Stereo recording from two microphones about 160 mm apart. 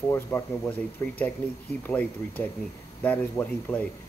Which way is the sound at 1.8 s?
10° left (ahead or behind).